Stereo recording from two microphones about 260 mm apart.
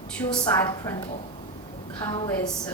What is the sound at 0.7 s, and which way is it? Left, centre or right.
Speech, centre.